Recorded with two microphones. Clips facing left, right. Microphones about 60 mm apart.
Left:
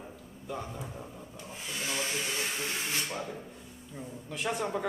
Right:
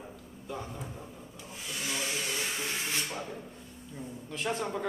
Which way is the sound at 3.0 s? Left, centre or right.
Centre.